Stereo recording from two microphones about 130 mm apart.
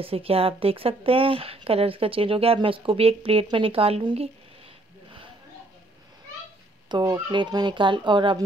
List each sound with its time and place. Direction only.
0.0 s a woman's voice: 45° right (ahead or behind)
6.9 s speech: 35° right (ahead or behind)